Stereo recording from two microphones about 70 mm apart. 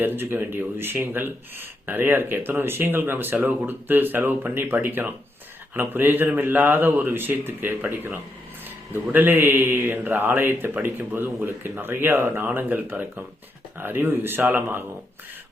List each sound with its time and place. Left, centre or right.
0.0 s speech: right
8.9 s mantra: right
10.8 s speech: right
11.8 s mantra: right
14.5 s speech: right